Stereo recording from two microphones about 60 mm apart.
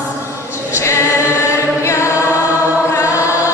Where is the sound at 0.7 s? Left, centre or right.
Left.